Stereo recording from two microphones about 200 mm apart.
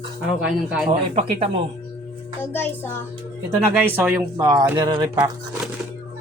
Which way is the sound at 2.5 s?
10° left (ahead or behind).